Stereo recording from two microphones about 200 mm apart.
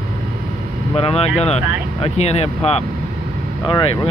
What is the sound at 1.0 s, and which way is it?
Speech, 30° left (ahead or behind).